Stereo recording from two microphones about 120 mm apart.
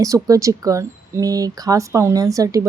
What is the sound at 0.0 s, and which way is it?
Speech, 30° right (ahead or behind).